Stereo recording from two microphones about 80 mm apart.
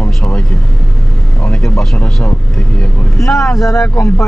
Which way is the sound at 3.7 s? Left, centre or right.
Left.